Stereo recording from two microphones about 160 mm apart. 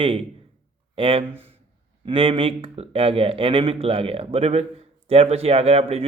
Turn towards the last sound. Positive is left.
turn(degrees=-40)  # may be behind; listen again after turning